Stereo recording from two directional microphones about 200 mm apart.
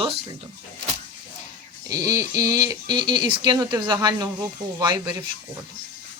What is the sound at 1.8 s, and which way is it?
Speech, 15° right (ahead or behind).